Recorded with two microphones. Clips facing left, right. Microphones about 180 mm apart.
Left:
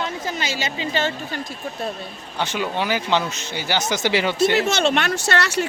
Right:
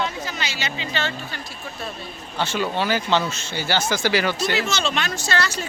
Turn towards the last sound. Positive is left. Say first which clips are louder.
# left 4 dB
turn(degrees=70)  # may be behind; listen again after turning